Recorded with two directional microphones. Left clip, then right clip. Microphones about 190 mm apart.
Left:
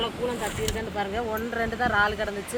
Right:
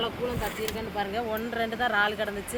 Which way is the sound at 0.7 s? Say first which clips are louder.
Left 2 dB; 5° right (ahead or behind).